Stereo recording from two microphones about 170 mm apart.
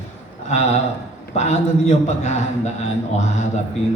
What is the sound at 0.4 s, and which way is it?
A man's voice, 40° left (ahead or behind).